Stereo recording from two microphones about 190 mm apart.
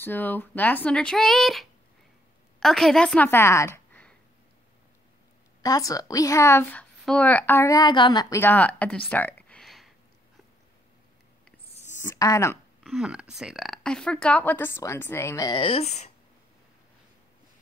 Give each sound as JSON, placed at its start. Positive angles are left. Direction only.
{"t": 0.0, "sound": "a woman's voice", "side_deg": 10}
{"t": 5.6, "sound": "a woman's voice", "side_deg": 20}
{"t": 12.0, "sound": "speech", "side_deg": 15}
{"t": 12.8, "sound": "a woman's voice", "side_deg": 0}